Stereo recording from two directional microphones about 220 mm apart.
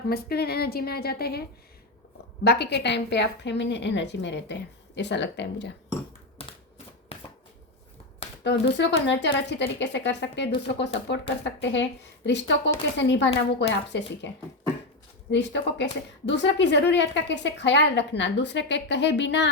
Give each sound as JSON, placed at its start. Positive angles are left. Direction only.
{"t": 0.1, "sound": "a woman's voice", "side_deg": 45}
{"t": 7.1, "sound": "shuffling cards", "side_deg": 25}
{"t": 8.4, "sound": "a woman's voice", "side_deg": 50}
{"t": 15.3, "sound": "a woman's voice", "side_deg": 50}